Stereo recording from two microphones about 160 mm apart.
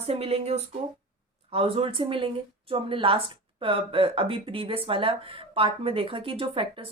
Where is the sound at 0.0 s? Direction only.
40° right (ahead or behind).